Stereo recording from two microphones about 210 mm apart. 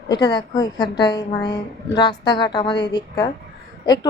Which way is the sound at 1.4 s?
50° left (ahead or behind).